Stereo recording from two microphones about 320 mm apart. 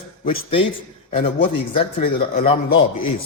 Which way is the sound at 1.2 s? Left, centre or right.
Centre.